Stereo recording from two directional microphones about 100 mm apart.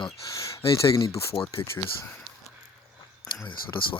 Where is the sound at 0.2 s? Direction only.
35° left (ahead or behind).